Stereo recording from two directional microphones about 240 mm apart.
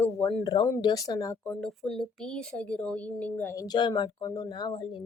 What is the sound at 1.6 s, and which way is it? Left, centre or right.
Speech, centre.